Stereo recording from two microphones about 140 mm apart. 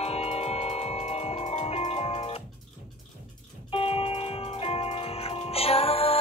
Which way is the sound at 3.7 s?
45° left (ahead or behind).